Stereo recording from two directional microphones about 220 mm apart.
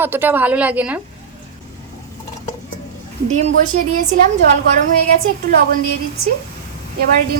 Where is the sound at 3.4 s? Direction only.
35° right (ahead or behind).